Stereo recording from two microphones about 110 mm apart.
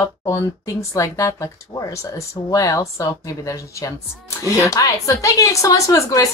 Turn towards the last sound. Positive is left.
turn(degrees=30)  # may be behind; listen again after turning